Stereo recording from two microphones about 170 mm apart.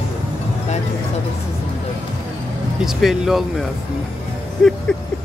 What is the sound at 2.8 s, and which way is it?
Speech, centre (ahead or behind).